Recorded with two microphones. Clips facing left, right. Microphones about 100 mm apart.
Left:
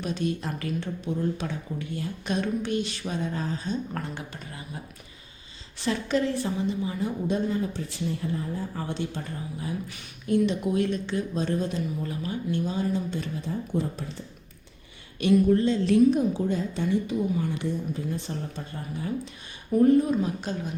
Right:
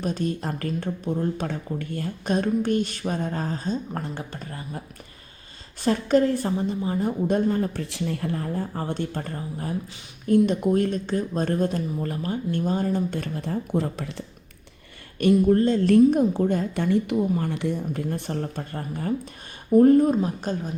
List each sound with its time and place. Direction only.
0.0 s speech: 40° right (ahead or behind)
5.8 s speech: 45° right (ahead or behind)
7.8 s a woman's voice: 70° right (ahead or behind)
8.7 s speech: 45° right (ahead or behind); by 14.3 s 80° right
15.2 s a woman's voice: 45° right (ahead or behind)